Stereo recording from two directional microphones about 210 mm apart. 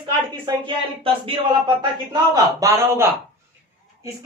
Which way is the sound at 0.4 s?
25° right (ahead or behind).